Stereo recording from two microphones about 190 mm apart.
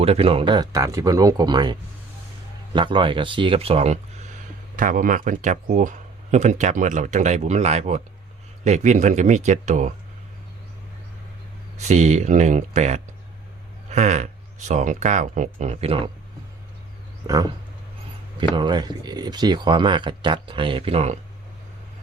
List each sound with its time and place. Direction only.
0.0 s speech: 30° right (ahead or behind)
4.8 s speech: 45° right (ahead or behind)
11.8 s speech: 35° right (ahead or behind)
18.3 s speech: 25° right (ahead or behind)